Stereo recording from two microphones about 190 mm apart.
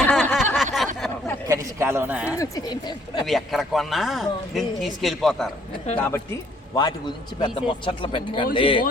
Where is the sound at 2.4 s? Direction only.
20° left (ahead or behind).